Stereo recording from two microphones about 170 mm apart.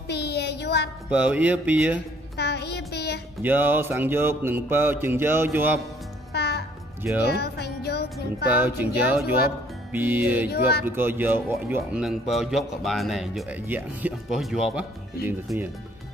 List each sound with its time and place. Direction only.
0.1 s a sound: 80° left
1.1 s mantra: 5° right (ahead or behind)
2.3 s child singing: 75° left (ahead or behind)
3.4 s mantra: 10° right (ahead or behind)
6.3 s music: 75° left (ahead or behind)
7.2 s speech: 70° left (ahead or behind)
8.5 s mantra: 10° right (ahead or behind)
11.5 s speech: 5° right (ahead or behind)